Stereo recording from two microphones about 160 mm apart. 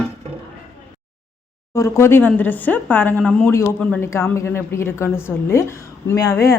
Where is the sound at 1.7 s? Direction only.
20° left (ahead or behind).